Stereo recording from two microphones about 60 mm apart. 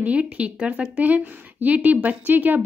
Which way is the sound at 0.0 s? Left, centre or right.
Right.